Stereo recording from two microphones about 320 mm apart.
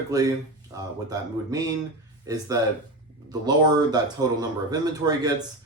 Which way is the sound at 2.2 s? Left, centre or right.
Centre.